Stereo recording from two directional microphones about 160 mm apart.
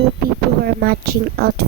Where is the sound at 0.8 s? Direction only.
75° right (ahead or behind).